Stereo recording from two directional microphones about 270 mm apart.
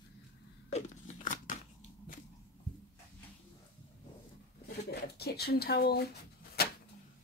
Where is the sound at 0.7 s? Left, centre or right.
Left.